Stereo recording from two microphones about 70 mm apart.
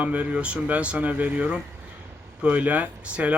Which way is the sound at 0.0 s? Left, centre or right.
Right.